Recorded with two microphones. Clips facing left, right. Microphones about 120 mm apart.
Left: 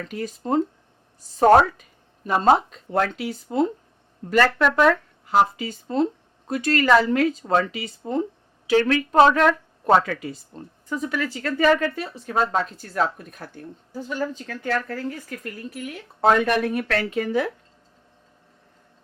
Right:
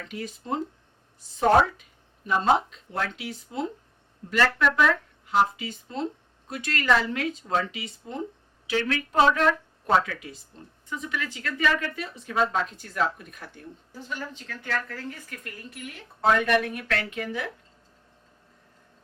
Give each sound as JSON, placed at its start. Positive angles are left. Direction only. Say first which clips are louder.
{"t": 0.1, "sound": "a woman's voice", "louder": "left 7 dB", "side_deg": 40}
{"t": 10.2, "sound": "speech", "louder": "left 8 dB", "side_deg": 40}
{"t": 16.2, "sound": "speech", "louder": "left 3 dB", "side_deg": 40}